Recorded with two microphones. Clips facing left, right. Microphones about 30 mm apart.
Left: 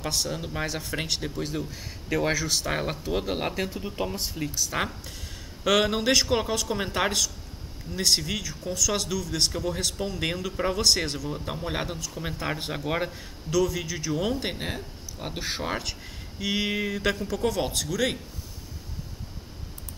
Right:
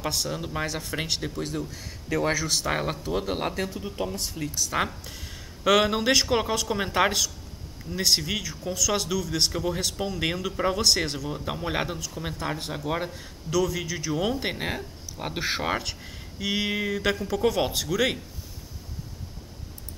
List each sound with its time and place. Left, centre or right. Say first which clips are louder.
0.0 s speech: even; centre
1.5 s speech: even; centre
4.6 s speech: right 3 dB; centre
15.8 s speech: even; centre